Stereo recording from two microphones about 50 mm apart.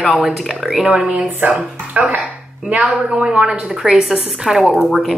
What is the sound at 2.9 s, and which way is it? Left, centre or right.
Speech, centre.